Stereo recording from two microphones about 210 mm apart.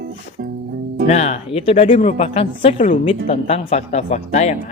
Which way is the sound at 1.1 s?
30° left (ahead or behind).